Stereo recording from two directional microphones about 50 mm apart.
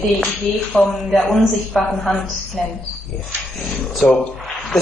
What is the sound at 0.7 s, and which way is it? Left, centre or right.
Speech, centre.